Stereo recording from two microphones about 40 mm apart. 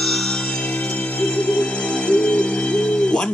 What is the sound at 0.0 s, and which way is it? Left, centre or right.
Music, centre.